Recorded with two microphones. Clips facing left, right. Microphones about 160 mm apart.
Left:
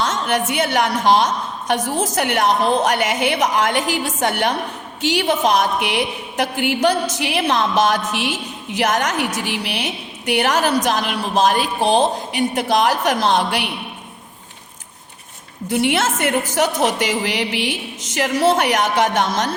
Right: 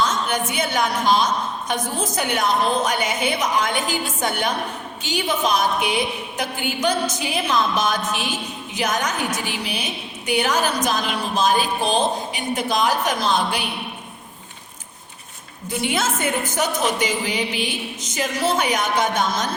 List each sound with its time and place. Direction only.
0.0 s a woman's voice: 80° left
15.7 s a woman's voice: 75° left (ahead or behind)